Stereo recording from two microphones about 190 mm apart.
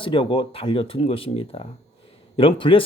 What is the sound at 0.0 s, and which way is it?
Speech, 25° left (ahead or behind).